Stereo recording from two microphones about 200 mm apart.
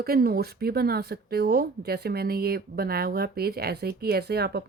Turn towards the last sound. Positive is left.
turn(degrees=-55)  # may be behind; listen again after turning